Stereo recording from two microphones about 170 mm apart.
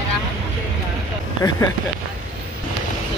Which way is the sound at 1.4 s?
15° left (ahead or behind).